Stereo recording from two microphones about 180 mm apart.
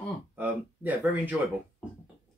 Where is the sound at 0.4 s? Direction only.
10° right (ahead or behind).